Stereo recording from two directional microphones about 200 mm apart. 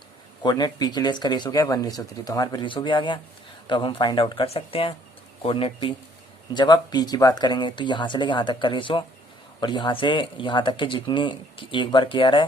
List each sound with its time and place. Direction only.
0.4 s speech: 20° left (ahead or behind)